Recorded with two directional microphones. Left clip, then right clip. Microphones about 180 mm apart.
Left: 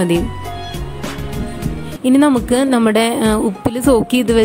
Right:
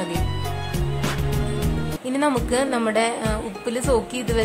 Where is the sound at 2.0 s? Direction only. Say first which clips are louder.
Left 9 dB; 35° left (ahead or behind).